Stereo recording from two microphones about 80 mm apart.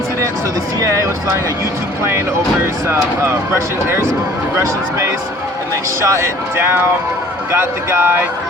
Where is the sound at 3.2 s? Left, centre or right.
Right.